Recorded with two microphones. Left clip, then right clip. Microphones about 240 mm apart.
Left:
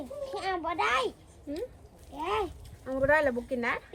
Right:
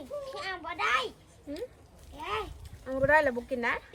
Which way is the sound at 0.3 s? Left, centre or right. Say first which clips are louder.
Left 9 dB; centre.